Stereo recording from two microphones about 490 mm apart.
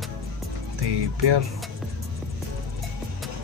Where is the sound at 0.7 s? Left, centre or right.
Right.